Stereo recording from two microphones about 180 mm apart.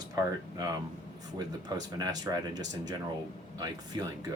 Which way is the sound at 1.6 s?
20° right (ahead or behind).